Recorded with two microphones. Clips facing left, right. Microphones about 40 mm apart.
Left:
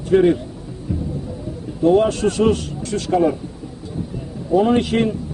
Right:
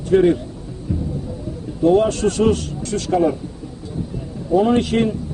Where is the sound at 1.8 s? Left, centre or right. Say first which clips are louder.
Even; centre.